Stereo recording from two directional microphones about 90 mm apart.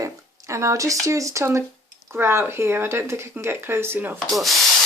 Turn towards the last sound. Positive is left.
turn(degrees=0)  # may be behind; listen again after turning